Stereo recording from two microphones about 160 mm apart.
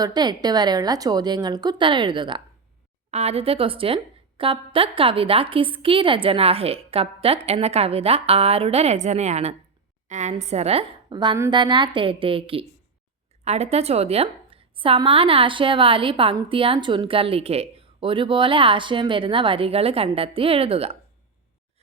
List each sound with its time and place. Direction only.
0.0 s a woman's voice: 25° right (ahead or behind)
3.1 s a woman's voice: 40° right (ahead or behind)